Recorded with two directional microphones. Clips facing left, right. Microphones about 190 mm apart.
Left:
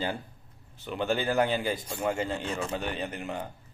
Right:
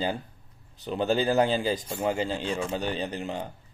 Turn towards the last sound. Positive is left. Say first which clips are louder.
# right 3 dB
turn(degrees=-30)  # may be behind; listen again after turning